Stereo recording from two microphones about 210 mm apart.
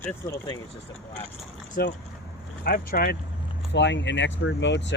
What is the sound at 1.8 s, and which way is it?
Speech, 45° left (ahead or behind).